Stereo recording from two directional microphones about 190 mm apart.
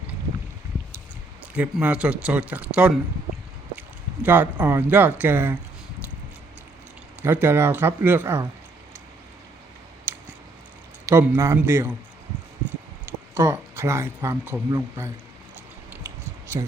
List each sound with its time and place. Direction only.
1.5 s speech: 5° right (ahead or behind)
7.2 s speech: 10° right (ahead or behind)
11.1 s speech: 10° right (ahead or behind)
13.3 s speech: 15° right (ahead or behind)
16.5 s speech: 20° right (ahead or behind)